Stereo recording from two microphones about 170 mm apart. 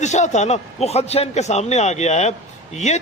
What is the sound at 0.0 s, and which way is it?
A man's voice, 45° left (ahead or behind).